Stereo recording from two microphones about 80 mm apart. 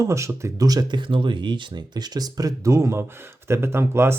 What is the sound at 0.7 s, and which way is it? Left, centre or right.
Speech, right.